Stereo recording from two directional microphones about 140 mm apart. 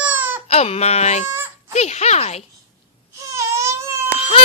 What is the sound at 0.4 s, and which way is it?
Speech, 45° left (ahead or behind).